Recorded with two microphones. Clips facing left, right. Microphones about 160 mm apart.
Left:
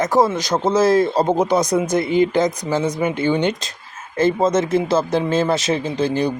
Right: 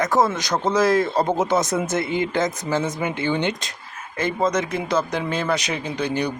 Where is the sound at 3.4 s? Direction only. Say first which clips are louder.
Left 4 dB; 20° right (ahead or behind).